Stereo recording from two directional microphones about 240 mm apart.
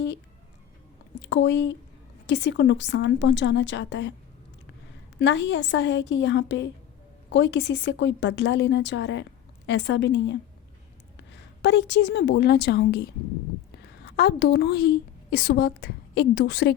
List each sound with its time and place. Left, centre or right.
1.2 s a woman's voice: left
5.2 s a woman's voice: left